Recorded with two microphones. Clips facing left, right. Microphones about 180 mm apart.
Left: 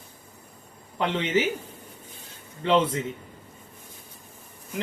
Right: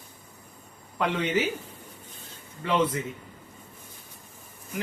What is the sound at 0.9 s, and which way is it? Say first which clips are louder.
Speech: left 1 dB; 25° left (ahead or behind).